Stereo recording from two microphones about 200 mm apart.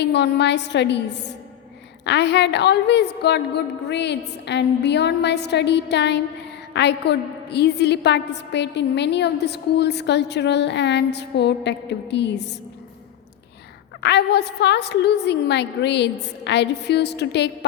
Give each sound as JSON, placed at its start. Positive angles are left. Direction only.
{"t": 0.0, "sound": "a woman's voice", "side_deg": 60}
{"t": 14.0, "sound": "a woman's voice", "side_deg": 55}